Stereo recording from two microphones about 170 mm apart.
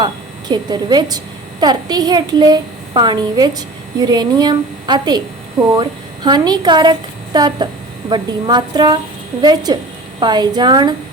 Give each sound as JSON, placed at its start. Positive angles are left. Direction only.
{"t": 0.0, "sound": "a woman's voice", "side_deg": -25}